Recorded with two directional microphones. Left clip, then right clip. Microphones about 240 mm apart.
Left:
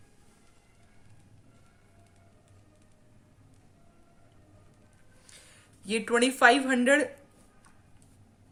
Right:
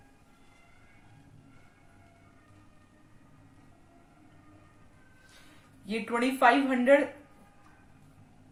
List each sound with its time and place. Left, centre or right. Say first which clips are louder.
5.8 s speech: left 4 dB; left